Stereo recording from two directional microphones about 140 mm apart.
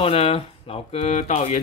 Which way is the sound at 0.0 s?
45° left (ahead or behind).